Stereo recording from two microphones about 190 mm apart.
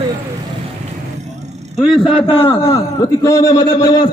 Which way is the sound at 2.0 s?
25° left (ahead or behind).